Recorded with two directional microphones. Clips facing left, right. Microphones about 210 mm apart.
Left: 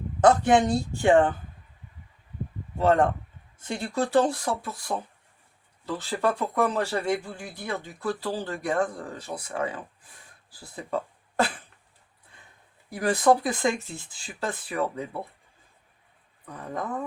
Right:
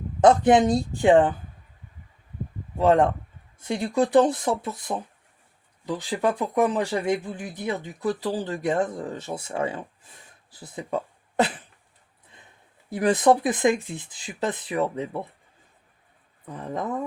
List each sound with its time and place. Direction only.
0.2 s speech: 20° right (ahead or behind)
2.7 s speech: 15° right (ahead or behind)
12.9 s speech: 20° right (ahead or behind)
16.5 s speech: 25° right (ahead or behind)